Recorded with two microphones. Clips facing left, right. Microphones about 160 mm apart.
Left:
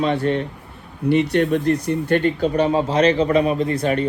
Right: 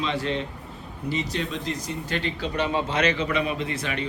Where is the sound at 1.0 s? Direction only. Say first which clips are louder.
Left 12 dB; 65° left (ahead or behind).